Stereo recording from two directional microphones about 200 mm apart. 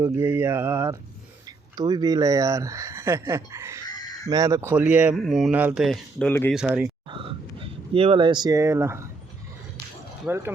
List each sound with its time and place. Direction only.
0.0 s speech: 10° right (ahead or behind); by 6.5 s 10° left (ahead or behind)
6.5 s speech: 5° right (ahead or behind)
7.1 s speech: 25° right (ahead or behind)
10.2 s speech: 10° right (ahead or behind)